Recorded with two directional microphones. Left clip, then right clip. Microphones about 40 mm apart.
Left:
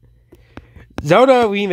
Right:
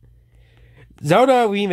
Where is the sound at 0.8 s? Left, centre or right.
Centre.